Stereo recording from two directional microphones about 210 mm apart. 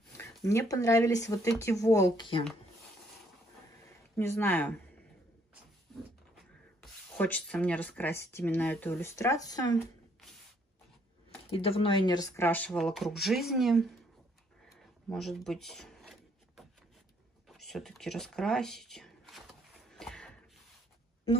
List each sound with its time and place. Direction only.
0.2 s speech: 15° left (ahead or behind)
4.2 s speech: 10° left (ahead or behind)
6.8 s speech: 5° left (ahead or behind)
11.5 s speech: 25° left (ahead or behind); by 13.8 s centre (ahead or behind)
15.0 s a sound: centre (ahead or behind)
17.5 s speech: centre (ahead or behind)
19.9 s a sound: centre (ahead or behind)